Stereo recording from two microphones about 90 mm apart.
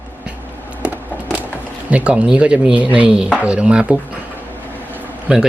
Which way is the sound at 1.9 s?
15° right (ahead or behind).